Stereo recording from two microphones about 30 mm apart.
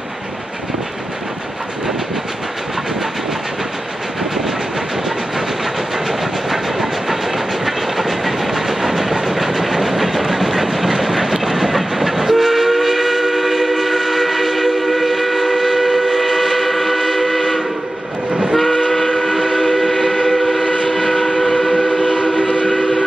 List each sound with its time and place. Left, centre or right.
6.5 s train: centre
18.9 s train: centre
22.4 s train: left